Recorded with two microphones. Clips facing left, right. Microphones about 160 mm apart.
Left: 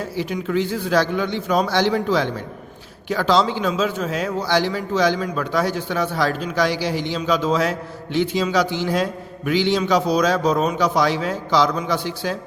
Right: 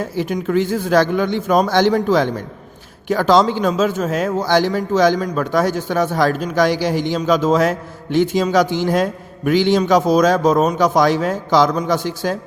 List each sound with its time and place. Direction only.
0.0 s a man's voice: 50° right (ahead or behind)